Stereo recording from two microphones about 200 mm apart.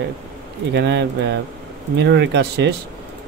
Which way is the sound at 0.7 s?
60° right (ahead or behind).